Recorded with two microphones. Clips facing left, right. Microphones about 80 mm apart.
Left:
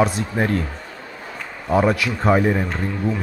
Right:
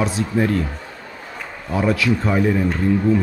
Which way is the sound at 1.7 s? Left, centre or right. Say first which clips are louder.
Left 1 dB; left.